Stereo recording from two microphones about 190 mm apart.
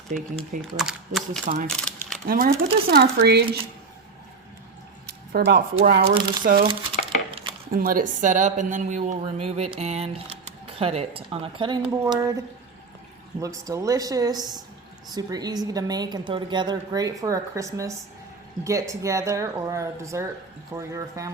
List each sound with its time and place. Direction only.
0.1 s a woman's voice: 40° right (ahead or behind)
0.6 s speech: centre (ahead or behind)
1.6 s a sound: 5° left (ahead or behind)
2.2 s speech: 50° right (ahead or behind)
5.0 s speech: 55° right (ahead or behind)
6.7 s crumpling: 30° right (ahead or behind)
7.7 s a woman's voice: 50° right (ahead or behind); by 12.4 s 20° right (ahead or behind)
13.4 s a woman's voice: 15° right (ahead or behind)